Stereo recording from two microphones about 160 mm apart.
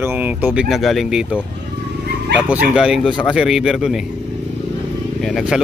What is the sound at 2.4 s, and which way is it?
Speech, 5° right (ahead or behind).